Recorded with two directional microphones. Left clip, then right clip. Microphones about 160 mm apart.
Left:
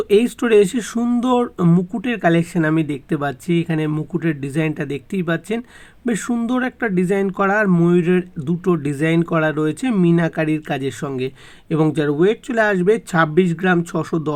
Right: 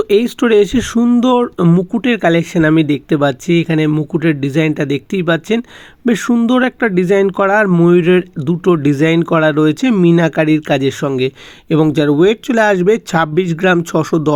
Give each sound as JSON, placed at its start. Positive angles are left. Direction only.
{"t": 0.0, "sound": "speech", "side_deg": -30}